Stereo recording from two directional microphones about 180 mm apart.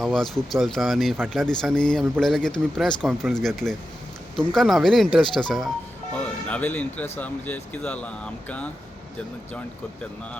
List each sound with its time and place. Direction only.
0.0 s a man's voice: centre (ahead or behind)